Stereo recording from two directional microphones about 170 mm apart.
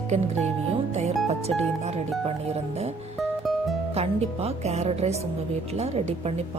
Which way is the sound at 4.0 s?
40° right (ahead or behind).